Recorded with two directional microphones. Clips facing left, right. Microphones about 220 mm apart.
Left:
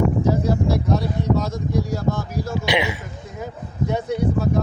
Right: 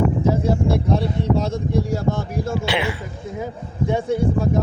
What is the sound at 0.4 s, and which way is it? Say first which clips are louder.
Speech: right 1 dB; 30° right (ahead or behind).